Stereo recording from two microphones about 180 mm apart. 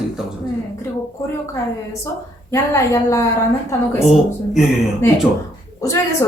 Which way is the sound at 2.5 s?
15° left (ahead or behind).